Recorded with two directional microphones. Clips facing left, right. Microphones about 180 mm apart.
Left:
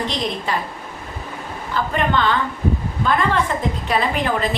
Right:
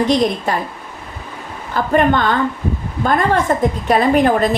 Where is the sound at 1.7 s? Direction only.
45° right (ahead or behind).